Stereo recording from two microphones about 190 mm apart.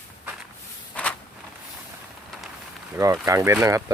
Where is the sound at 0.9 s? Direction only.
5° left (ahead or behind).